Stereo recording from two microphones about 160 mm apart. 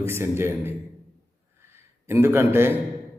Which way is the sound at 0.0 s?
15° right (ahead or behind).